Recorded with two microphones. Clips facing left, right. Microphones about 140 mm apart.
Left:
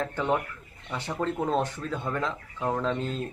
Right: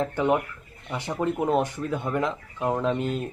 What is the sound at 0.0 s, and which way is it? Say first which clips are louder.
Speech: right 4 dB; 15° right (ahead or behind).